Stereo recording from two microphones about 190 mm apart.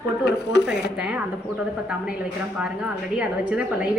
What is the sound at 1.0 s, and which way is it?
Speech, 5° right (ahead or behind).